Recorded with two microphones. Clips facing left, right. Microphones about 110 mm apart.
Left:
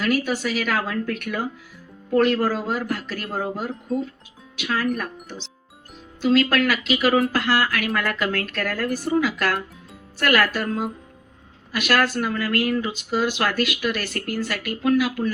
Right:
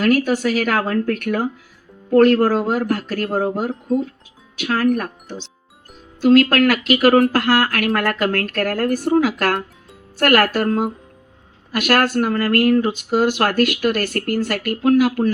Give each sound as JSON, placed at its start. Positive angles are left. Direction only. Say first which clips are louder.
{"t": 0.0, "sound": "speech", "louder": "right 6 dB", "side_deg": -55}
{"t": 6.2, "sound": "speech", "louder": "right 6 dB", "side_deg": -60}